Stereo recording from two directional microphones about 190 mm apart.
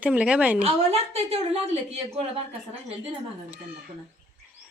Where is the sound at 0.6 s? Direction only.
35° right (ahead or behind).